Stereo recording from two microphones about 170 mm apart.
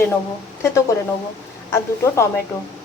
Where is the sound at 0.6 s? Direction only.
20° left (ahead or behind).